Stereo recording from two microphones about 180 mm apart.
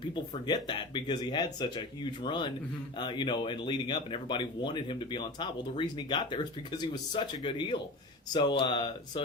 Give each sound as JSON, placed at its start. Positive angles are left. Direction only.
{"t": 0.1, "sound": "speech", "side_deg": 25}